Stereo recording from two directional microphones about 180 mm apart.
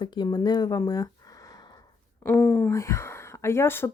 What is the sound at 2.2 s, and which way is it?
Speech, 10° left (ahead or behind).